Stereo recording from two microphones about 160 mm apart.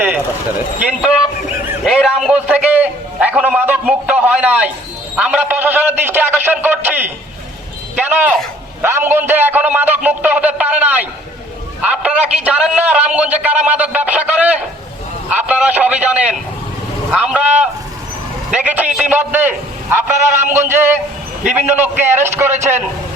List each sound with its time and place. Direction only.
1.8 s a man's voice: centre (ahead or behind)